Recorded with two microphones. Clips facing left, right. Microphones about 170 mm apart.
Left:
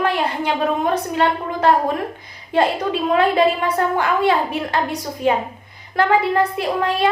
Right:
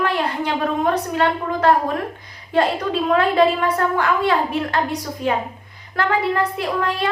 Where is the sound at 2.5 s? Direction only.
15° left (ahead or behind).